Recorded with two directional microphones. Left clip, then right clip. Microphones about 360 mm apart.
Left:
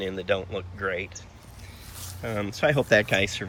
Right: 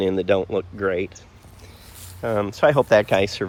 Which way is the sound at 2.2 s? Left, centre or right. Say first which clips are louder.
Right 7 dB; centre.